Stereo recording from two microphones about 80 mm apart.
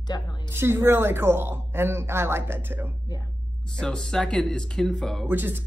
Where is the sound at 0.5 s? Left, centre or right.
Right.